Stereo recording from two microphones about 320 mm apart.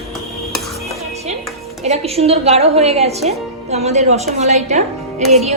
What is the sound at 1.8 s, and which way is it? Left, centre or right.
A woman's voice, centre.